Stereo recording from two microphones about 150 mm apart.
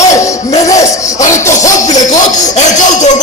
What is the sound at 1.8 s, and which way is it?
Speech, 25° left (ahead or behind).